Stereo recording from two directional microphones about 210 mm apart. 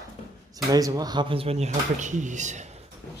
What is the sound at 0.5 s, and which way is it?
Speech, 15° right (ahead or behind).